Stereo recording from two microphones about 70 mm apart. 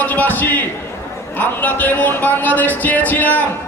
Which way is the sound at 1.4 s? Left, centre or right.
Left.